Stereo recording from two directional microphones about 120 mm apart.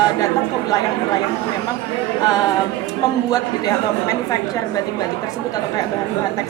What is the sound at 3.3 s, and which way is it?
Speech, 30° left (ahead or behind).